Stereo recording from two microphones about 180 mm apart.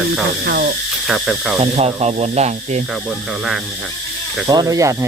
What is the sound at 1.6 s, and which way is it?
Speech, 35° right (ahead or behind).